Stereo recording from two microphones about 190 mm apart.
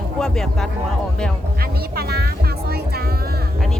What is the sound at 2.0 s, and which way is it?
Speech, 55° right (ahead or behind).